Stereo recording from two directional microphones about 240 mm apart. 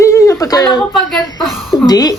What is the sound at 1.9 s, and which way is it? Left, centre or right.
Speech, centre.